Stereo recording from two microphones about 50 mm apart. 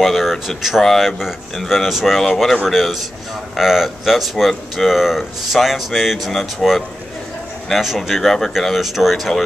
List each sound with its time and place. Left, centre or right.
0.0 s speech: centre